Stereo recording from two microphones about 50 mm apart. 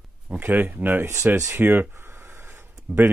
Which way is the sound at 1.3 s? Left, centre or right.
Right.